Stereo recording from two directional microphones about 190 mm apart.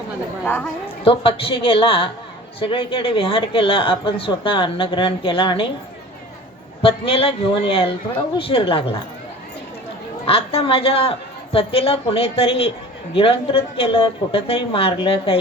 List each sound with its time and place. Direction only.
0.4 s a woman's voice: 10° left (ahead or behind)
1.0 s a woman's voice: 30° left (ahead or behind)
6.8 s a woman's voice: 30° left (ahead or behind)
10.2 s a woman's voice: 30° left (ahead or behind)